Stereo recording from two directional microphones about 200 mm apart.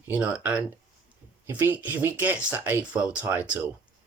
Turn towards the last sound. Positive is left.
turn(degrees=-10)  # may be behind; listen again after turning